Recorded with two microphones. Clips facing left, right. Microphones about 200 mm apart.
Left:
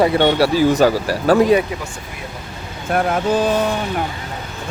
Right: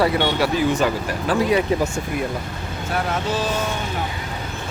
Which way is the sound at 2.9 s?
55° left (ahead or behind).